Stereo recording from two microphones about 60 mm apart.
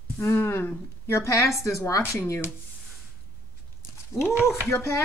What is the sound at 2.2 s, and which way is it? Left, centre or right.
Speech, left.